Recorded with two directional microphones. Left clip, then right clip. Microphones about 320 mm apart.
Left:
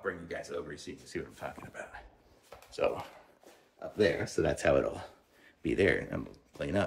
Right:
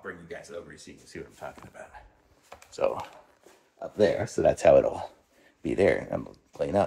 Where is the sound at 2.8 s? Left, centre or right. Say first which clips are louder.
Right 4 dB; centre.